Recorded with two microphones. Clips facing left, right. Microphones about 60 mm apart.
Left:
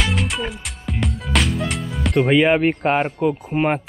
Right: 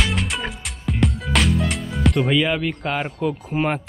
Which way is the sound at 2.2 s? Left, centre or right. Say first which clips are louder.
Left 8 dB; left.